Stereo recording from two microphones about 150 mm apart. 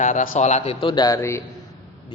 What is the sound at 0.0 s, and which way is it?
A man's voice, 55° left (ahead or behind).